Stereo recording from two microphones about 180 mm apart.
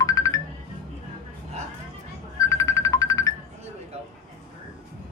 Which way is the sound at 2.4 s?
15° left (ahead or behind).